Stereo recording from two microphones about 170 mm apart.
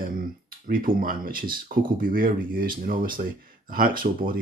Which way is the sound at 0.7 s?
55° right (ahead or behind).